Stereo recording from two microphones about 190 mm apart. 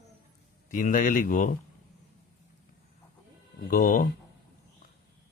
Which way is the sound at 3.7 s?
45° left (ahead or behind).